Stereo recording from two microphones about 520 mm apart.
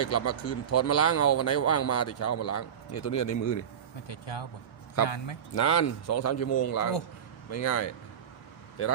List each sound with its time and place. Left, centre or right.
0.0 s a man's voice: left
4.0 s speech: left
5.5 s a man's voice: left